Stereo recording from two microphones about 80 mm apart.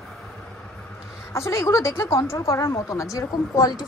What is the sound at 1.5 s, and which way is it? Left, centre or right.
A woman's voice, left.